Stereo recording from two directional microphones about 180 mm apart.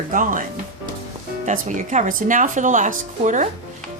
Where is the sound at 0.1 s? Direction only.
45° right (ahead or behind).